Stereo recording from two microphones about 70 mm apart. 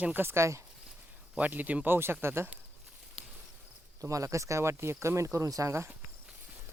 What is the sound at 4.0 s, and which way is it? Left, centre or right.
Speech, right.